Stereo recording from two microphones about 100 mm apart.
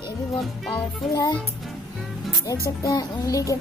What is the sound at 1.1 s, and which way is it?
Speech, 35° left (ahead or behind).